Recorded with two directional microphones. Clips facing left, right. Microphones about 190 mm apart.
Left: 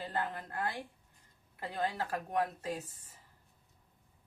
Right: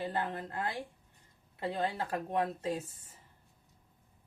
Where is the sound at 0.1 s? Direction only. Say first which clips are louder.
Right 2 dB; 25° right (ahead or behind).